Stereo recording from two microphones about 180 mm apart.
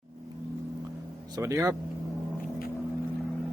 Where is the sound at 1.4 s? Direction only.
15° right (ahead or behind).